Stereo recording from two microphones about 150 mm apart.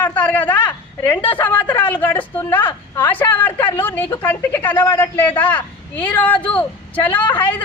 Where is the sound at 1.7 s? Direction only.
10° left (ahead or behind).